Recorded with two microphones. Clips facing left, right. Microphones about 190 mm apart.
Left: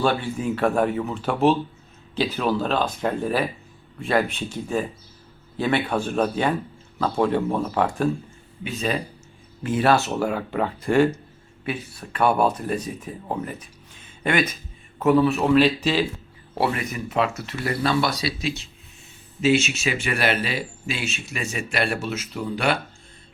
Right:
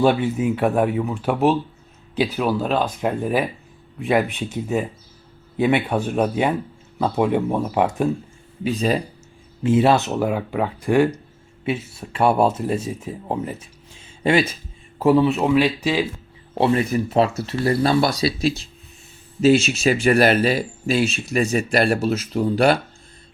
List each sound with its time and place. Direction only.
0.0 s speech: 20° right (ahead or behind)
8.6 s speech: 35° right (ahead or behind)
9.6 s speech: 25° right (ahead or behind)
11.6 s speech: 25° right (ahead or behind)
15.4 s speech: 10° right (ahead or behind)
16.6 s speech: 30° right (ahead or behind)